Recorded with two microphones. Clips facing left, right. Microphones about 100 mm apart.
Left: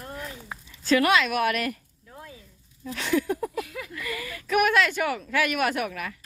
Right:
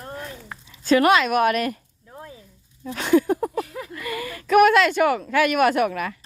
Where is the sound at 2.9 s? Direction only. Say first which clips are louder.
Right 7 dB; 40° right (ahead or behind).